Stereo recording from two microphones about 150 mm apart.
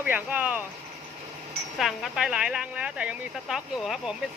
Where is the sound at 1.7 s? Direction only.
Centre (ahead or behind).